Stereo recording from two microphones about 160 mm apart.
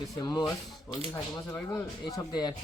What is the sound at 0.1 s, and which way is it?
Speech, 25° left (ahead or behind).